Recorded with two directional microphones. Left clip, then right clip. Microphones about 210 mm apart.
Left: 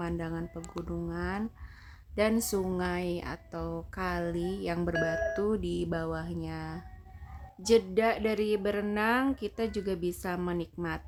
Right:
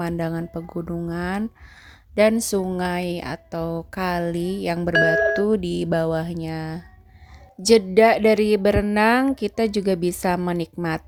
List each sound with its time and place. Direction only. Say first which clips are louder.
0.0 s a woman's voice: right 9 dB; 35° right (ahead or behind)